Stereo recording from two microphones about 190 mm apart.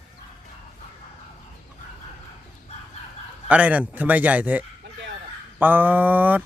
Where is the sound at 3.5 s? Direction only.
5° right (ahead or behind).